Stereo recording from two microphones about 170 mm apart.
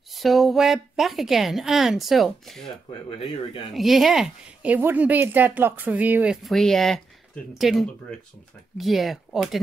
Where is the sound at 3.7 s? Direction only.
Centre (ahead or behind).